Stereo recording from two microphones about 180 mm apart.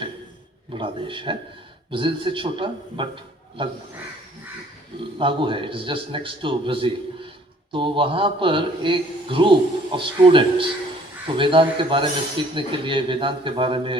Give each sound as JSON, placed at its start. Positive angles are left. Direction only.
{"t": 0.7, "sound": "a man's voice", "side_deg": -30}
{"t": 5.1, "sound": "a man's voice", "side_deg": -30}